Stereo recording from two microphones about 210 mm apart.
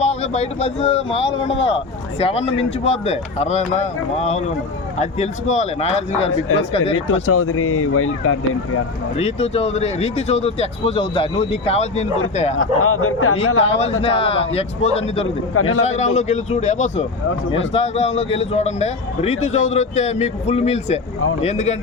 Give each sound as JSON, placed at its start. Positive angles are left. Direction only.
{"t": 0.0, "sound": "a man's voice", "side_deg": 30}
{"t": 6.9, "sound": "speech", "side_deg": 80}
{"t": 9.1, "sound": "speech", "side_deg": 30}
{"t": 12.5, "sound": "speech", "side_deg": 85}
{"t": 13.5, "sound": "speech", "side_deg": 70}
{"t": 14.0, "sound": "speech", "side_deg": 25}
{"t": 15.5, "sound": "speech", "side_deg": 75}
{"t": 15.8, "sound": "a man's voice", "side_deg": 30}